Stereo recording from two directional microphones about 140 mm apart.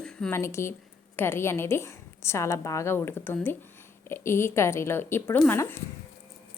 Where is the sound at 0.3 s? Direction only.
20° left (ahead or behind).